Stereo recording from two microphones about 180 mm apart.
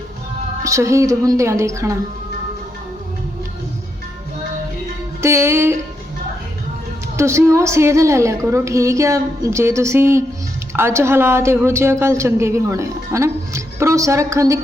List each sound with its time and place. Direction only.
0.6 s a woman's voice: 15° right (ahead or behind)
5.2 s a woman's voice: 15° right (ahead or behind)
7.2 s a woman's voice: 15° right (ahead or behind)